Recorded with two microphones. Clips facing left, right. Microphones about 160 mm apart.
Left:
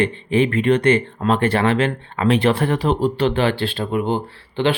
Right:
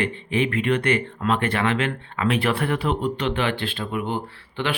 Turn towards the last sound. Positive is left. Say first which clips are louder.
# left 7 dB
turn(degrees=30)  # may be behind; listen again after turning